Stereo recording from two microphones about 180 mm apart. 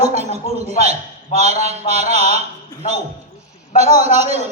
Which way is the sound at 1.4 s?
35° right (ahead or behind).